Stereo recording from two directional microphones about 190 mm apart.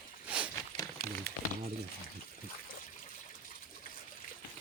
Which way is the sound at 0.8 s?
15° left (ahead or behind).